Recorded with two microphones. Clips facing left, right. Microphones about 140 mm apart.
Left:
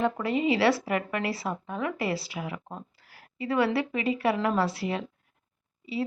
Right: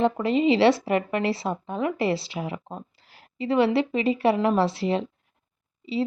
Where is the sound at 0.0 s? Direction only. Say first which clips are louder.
Right 5 dB; 25° right (ahead or behind).